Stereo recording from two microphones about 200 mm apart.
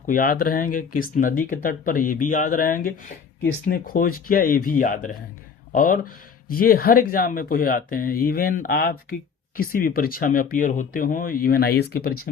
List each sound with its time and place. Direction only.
0.1 s speech: 45° left (ahead or behind)